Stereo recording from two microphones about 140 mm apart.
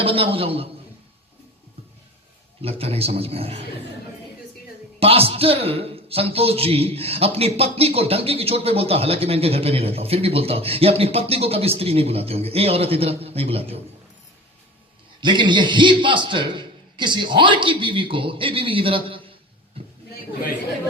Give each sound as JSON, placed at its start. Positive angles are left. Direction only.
{"t": 0.0, "sound": "a man's voice", "side_deg": -40}
{"t": 2.6, "sound": "a man's voice", "side_deg": -45}
{"t": 4.9, "sound": "a man's voice", "side_deg": -45}
{"t": 15.2, "sound": "a man's voice", "side_deg": -35}